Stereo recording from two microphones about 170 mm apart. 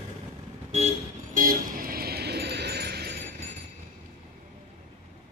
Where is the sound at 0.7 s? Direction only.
45° right (ahead or behind); by 3.1 s 70° right (ahead or behind).